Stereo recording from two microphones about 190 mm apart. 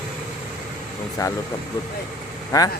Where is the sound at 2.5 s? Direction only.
20° left (ahead or behind).